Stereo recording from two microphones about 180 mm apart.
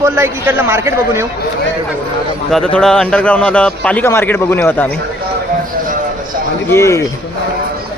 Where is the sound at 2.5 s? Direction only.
5° left (ahead or behind).